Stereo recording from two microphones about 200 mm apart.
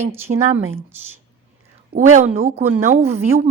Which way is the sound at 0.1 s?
10° right (ahead or behind).